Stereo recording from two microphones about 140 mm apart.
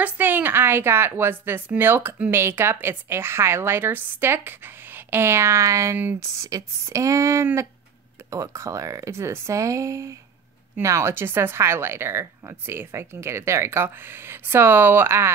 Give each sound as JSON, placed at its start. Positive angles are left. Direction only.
{"t": 0.0, "sound": "a woman's voice", "side_deg": -15}